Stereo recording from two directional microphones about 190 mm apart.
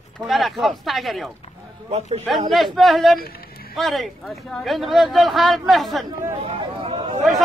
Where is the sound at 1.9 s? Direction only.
35° right (ahead or behind).